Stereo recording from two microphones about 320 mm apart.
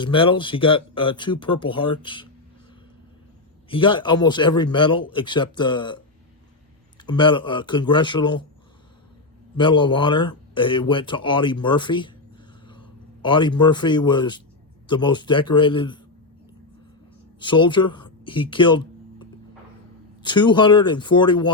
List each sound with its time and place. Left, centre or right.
0.0 s speech: centre
3.7 s speech: centre
7.0 s speech: centre
9.6 s a man's voice: centre
17.4 s speech: centre
20.2 s speech: centre